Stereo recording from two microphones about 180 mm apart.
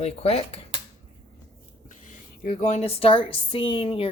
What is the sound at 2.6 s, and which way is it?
Speech, 40° left (ahead or behind).